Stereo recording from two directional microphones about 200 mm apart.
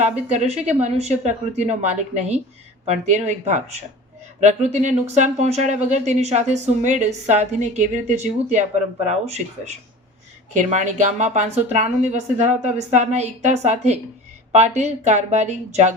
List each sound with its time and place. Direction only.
0.0 s speech: 35° right (ahead or behind)